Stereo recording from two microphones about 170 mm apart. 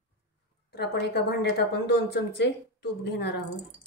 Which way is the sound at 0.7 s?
75° left (ahead or behind).